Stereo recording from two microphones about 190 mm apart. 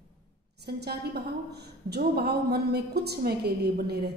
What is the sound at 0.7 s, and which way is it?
A woman's voice, 60° right (ahead or behind).